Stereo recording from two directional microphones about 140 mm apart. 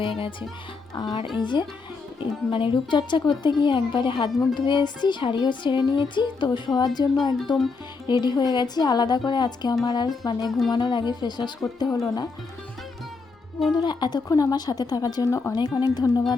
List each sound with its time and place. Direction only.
0.2 s speech: 35° left (ahead or behind)
13.7 s speech: 30° left (ahead or behind)